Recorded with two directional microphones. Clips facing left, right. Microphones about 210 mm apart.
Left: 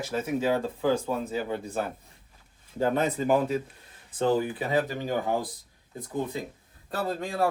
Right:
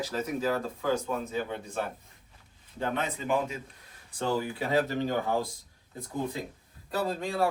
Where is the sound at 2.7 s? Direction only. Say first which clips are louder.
Left 6 dB; 40° left (ahead or behind).